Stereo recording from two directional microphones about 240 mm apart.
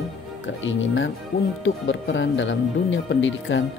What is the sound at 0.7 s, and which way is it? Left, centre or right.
Speech, left.